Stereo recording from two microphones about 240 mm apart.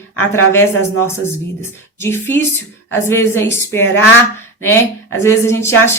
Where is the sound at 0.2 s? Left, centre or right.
Centre.